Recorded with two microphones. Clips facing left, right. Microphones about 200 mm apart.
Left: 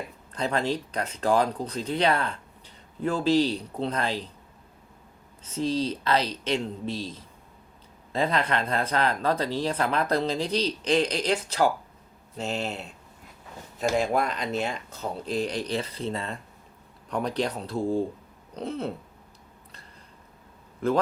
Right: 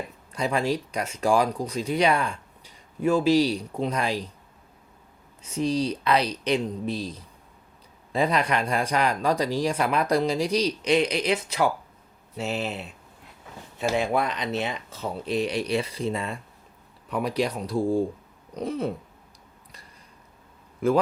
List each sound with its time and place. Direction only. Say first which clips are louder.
0.3 s speech: right 2 dB; 10° right (ahead or behind)
5.4 s speech: right 2 dB; 10° right (ahead or behind)
12.4 s speech: right 1 dB; 5° right (ahead or behind)
14.0 s speech: right 1 dB; 40° left (ahead or behind)
14.4 s speech: even; 5° right (ahead or behind)